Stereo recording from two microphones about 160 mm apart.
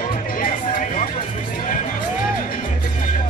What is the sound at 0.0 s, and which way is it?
Music, 60° left (ahead or behind).